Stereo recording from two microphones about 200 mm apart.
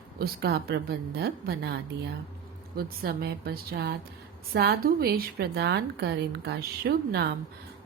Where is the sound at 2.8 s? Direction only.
50° right (ahead or behind).